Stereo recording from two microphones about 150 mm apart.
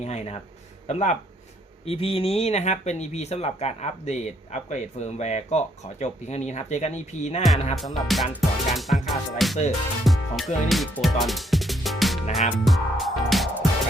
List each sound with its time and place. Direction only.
0.0 s speech: 45° left (ahead or behind)
7.9 s music: centre (ahead or behind)